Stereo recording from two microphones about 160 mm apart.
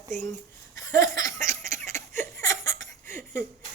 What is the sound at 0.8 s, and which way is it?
Laughter, 20° left (ahead or behind).